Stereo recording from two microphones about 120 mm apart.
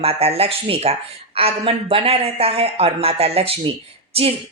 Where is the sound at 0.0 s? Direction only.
55° right (ahead or behind).